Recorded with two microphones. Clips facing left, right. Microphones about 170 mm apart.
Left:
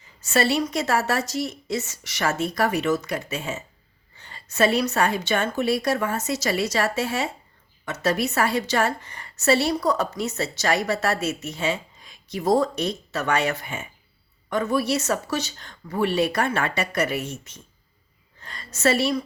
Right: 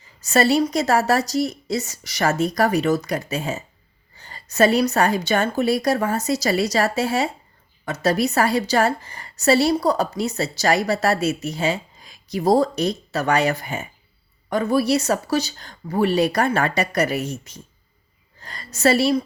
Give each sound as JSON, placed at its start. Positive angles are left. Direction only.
{"t": 0.2, "sound": "a woman's voice", "side_deg": -40}